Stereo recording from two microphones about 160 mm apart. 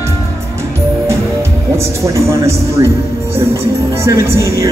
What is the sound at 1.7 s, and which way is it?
Music, 20° right (ahead or behind).